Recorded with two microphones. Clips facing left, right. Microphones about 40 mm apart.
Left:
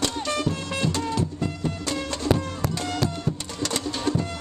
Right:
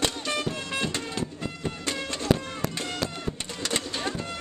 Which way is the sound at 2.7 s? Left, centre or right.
Right.